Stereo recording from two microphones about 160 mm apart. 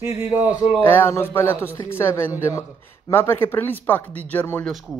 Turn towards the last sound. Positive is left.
turn(degrees=0)  # may be behind; listen again after turning